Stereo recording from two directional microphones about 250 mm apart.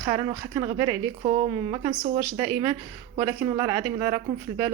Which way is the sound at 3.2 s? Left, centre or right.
Centre.